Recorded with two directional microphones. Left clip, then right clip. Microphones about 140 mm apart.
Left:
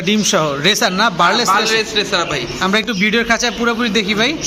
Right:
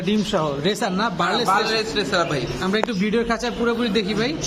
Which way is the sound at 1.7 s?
65° right (ahead or behind).